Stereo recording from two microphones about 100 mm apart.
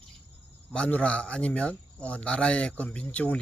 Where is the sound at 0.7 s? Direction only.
10° left (ahead or behind).